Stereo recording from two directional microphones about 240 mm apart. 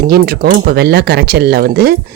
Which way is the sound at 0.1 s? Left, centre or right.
Right.